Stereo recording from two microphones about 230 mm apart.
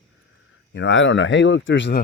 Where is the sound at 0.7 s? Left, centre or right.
Left.